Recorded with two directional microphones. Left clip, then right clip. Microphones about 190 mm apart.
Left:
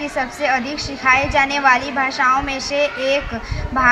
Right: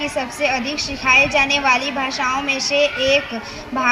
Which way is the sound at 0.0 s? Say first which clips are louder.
Even; 25° right (ahead or behind).